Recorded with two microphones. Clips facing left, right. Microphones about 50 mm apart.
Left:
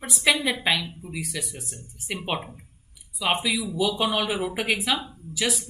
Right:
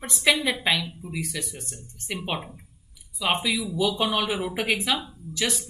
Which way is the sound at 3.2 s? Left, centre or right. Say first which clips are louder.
Even; centre.